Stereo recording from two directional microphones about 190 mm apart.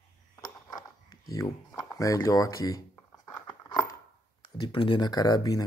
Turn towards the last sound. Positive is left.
turn(degrees=20)  # may be behind; listen again after turning